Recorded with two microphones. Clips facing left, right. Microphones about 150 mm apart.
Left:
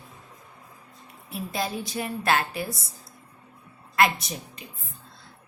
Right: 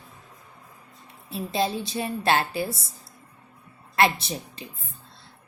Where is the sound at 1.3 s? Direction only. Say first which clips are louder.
Right 4 dB; 25° right (ahead or behind).